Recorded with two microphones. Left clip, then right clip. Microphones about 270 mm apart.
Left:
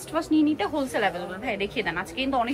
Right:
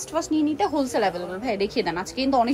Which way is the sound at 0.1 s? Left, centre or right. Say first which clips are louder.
Left 1 dB; centre.